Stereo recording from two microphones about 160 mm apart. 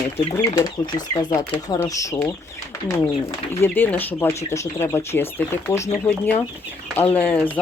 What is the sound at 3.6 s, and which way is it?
Speech, 10° left (ahead or behind).